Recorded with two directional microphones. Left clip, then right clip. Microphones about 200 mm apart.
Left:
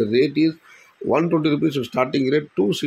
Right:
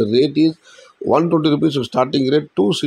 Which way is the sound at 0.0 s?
20° right (ahead or behind).